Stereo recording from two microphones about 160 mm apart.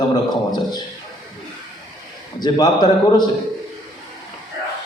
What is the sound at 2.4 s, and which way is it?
Speech, 25° left (ahead or behind).